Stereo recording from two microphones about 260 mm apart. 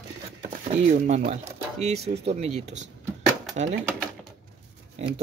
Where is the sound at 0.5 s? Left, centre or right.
Right.